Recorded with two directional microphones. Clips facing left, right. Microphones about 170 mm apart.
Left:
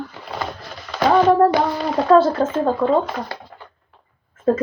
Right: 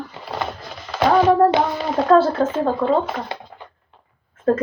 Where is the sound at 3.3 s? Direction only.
20° right (ahead or behind).